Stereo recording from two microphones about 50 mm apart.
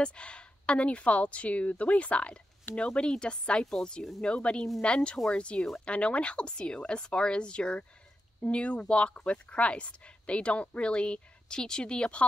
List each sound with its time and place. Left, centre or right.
0.0 s a woman's voice: centre